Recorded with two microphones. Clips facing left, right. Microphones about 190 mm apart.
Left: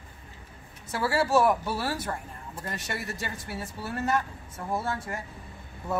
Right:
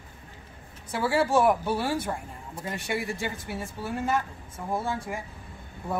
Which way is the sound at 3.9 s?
10° right (ahead or behind).